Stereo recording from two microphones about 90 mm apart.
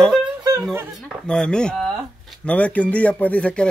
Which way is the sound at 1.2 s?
10° left (ahead or behind).